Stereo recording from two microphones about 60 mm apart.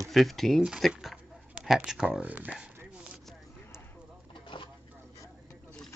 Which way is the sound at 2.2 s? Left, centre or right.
Right.